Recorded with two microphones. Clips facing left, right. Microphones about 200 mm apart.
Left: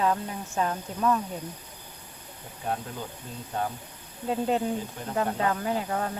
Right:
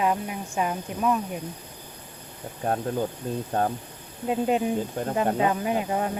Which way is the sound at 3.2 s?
45° right (ahead or behind).